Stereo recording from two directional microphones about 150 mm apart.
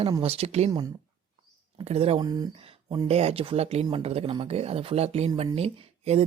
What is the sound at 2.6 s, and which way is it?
Speech, 35° right (ahead or behind).